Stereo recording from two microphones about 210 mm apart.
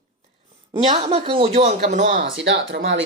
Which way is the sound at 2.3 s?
65° right (ahead or behind).